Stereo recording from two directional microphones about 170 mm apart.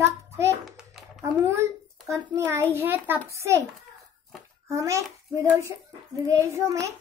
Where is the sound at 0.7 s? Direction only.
5° right (ahead or behind).